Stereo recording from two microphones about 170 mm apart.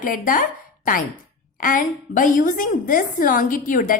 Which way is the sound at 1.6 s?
50° left (ahead or behind).